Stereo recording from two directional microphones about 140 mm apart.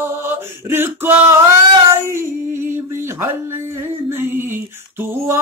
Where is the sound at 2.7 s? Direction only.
20° right (ahead or behind).